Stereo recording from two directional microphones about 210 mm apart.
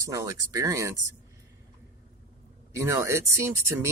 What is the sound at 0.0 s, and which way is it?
Speech, 15° right (ahead or behind).